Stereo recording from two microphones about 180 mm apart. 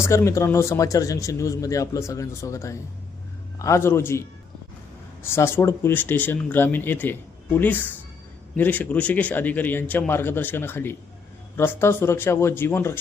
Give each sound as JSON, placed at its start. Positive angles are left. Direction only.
{"t": 0.0, "sound": "speech", "side_deg": 15}
{"t": 5.2, "sound": "speech", "side_deg": 15}